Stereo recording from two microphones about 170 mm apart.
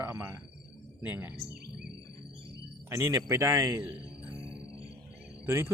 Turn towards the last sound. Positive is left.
turn(degrees=-15)  # may be behind; listen again after turning